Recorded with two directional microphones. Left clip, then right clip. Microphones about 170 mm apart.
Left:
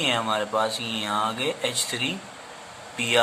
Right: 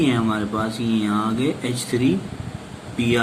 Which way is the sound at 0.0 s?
40° left (ahead or behind).